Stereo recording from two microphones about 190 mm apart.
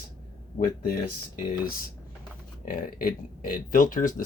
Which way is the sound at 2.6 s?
45° left (ahead or behind).